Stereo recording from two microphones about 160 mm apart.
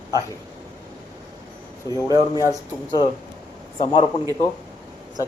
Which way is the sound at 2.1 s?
20° right (ahead or behind).